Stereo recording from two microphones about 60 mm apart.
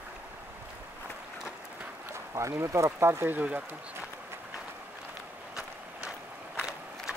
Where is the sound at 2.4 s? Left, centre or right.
Right.